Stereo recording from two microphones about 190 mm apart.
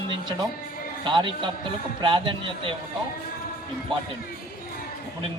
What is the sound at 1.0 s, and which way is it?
Speech, 25° right (ahead or behind).